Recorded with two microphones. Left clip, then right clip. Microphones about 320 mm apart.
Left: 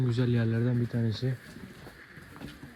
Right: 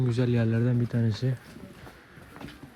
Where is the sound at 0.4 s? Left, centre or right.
Right.